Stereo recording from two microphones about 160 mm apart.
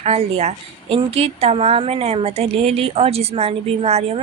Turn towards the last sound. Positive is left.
turn(degrees=-40)  # may be behind; listen again after turning